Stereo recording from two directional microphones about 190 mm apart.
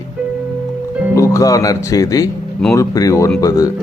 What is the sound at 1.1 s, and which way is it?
Speech, 15° left (ahead or behind).